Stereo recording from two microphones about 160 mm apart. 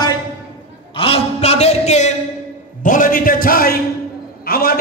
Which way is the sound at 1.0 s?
35° left (ahead or behind).